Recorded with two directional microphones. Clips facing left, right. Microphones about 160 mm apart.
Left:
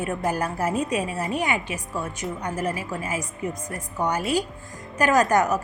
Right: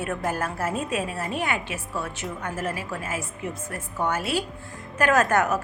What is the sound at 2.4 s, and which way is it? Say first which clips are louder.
Speech: left 3 dB; 15° left (ahead or behind).